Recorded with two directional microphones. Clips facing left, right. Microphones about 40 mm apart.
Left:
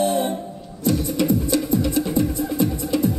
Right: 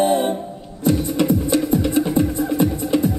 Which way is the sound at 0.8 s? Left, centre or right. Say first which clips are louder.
Right 3 dB; right.